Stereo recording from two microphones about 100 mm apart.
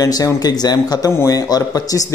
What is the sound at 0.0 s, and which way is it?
A man's voice, 35° left (ahead or behind).